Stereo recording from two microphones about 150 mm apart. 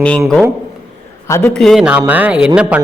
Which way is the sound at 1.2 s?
20° left (ahead or behind).